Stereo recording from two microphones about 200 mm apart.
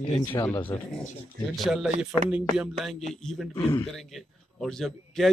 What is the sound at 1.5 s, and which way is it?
A man's voice, centre (ahead or behind).